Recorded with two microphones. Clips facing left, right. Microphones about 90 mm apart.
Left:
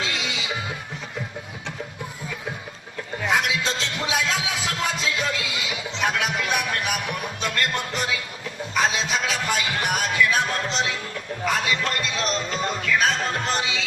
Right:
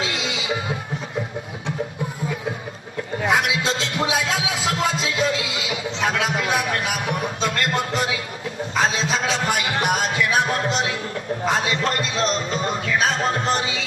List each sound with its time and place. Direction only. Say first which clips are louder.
0.0 s music: right 3 dB; 35° right (ahead or behind)
3.2 s music: right 2 dB; 35° right (ahead or behind)
5.5 s a sound: right 3 dB; 35° right (ahead or behind)
8.7 s music: right 1 dB; 35° right (ahead or behind)